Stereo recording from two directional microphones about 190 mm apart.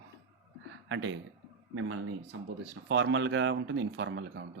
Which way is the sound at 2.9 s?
70° right (ahead or behind).